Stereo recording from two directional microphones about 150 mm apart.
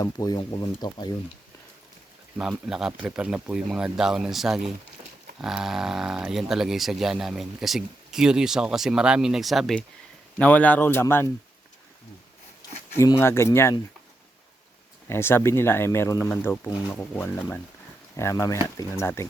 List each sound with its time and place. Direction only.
0.0 s speech: 25° left (ahead or behind)
2.4 s speech: 5° right (ahead or behind); by 11.3 s 15° left (ahead or behind)
12.9 s speech: 20° left (ahead or behind)
15.1 s speech: 15° left (ahead or behind)